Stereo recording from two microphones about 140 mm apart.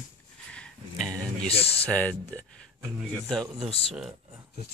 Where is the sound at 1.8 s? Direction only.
10° left (ahead or behind).